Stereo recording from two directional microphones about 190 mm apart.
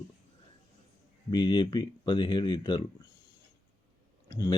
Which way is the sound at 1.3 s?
25° left (ahead or behind).